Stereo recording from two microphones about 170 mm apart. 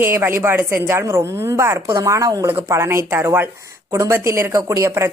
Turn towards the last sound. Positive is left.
turn(degrees=-15)  # may be behind; listen again after turning